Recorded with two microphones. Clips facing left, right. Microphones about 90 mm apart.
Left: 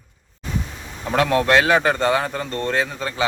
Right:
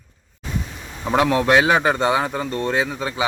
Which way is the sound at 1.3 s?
10° right (ahead or behind).